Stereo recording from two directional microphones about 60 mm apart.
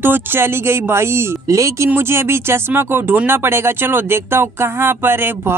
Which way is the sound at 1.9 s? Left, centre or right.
Right.